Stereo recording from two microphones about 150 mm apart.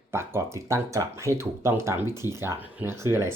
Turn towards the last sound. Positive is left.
turn(degrees=-15)  # may be behind; listen again after turning